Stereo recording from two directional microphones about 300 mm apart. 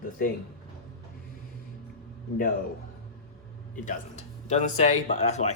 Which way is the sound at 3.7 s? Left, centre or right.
Left.